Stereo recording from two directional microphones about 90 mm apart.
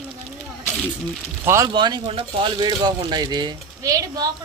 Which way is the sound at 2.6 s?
55° right (ahead or behind).